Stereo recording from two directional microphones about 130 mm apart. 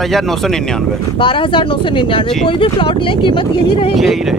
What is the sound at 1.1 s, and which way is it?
Speech, 40° left (ahead or behind).